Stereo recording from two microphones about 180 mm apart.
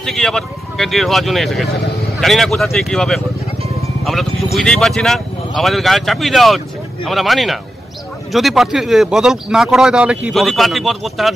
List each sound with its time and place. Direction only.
0.0 s speech: centre (ahead or behind)
4.0 s music: centre (ahead or behind)
4.6 s speech: centre (ahead or behind)